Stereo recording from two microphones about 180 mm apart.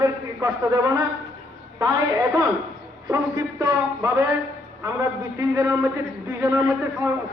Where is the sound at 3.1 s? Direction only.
15° right (ahead or behind).